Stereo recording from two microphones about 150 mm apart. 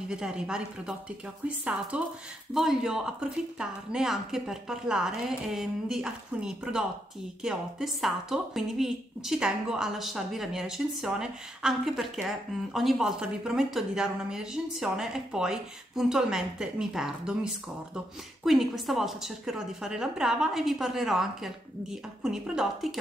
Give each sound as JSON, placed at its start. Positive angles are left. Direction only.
{"t": 0.1, "sound": "a woman's voice", "side_deg": -5}